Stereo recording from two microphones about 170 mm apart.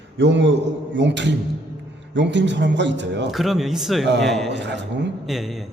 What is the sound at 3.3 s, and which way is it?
A man's voice, centre (ahead or behind).